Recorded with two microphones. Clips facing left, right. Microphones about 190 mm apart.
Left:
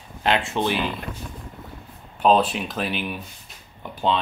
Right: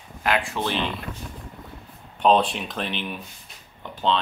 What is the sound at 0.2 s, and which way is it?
Speech, 25° left (ahead or behind).